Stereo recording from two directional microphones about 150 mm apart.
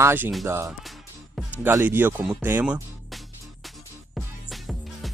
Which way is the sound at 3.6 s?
Centre (ahead or behind).